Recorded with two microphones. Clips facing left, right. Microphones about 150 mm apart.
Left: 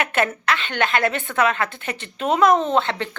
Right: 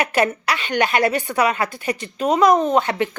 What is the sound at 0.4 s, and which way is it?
A woman's voice, 10° right (ahead or behind).